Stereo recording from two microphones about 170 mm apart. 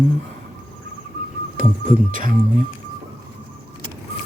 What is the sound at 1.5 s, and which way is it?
Speech, 50° right (ahead or behind).